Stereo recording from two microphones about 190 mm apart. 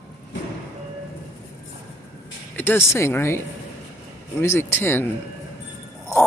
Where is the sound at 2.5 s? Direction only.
10° left (ahead or behind).